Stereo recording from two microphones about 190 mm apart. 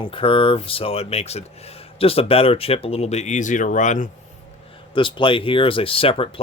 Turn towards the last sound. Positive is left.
turn(degrees=30)  # may be behind; listen again after turning